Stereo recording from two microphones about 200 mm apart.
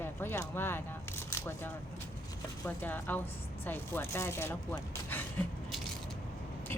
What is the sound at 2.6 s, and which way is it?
Speech, 10° left (ahead or behind).